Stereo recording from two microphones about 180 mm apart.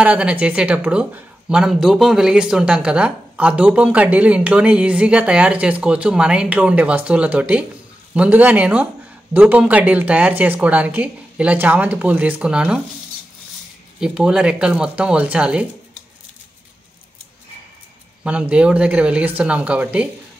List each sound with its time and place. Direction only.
0.0 s speech: 5° right (ahead or behind)
13.9 s speech: 5° right (ahead or behind)
18.2 s speech: 5° right (ahead or behind)